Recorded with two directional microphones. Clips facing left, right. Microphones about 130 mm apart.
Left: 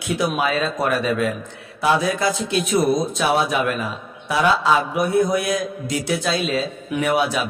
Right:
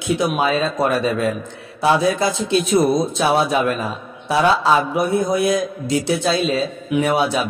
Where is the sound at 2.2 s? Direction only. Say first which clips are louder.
Right 3 dB; 30° right (ahead or behind).